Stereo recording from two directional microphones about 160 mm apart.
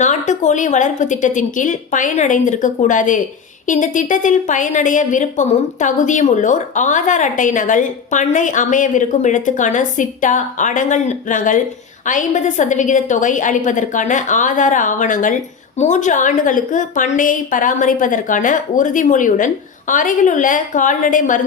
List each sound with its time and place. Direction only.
0.0 s a woman's voice: 50° left (ahead or behind)